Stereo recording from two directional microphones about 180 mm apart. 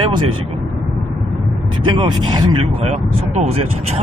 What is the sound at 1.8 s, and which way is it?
Speech, 25° right (ahead or behind).